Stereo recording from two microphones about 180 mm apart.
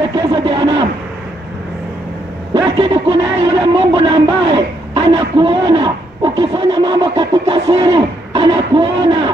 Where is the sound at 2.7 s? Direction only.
30° right (ahead or behind).